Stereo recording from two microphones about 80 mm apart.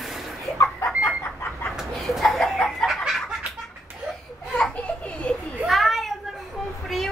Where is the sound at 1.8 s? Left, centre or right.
Centre.